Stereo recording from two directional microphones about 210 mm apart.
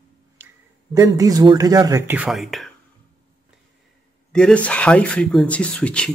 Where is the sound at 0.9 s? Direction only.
15° right (ahead or behind).